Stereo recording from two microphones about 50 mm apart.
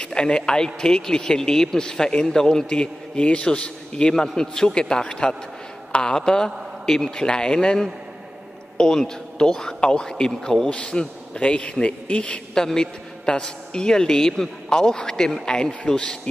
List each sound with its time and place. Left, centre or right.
0.0 s a man's voice: centre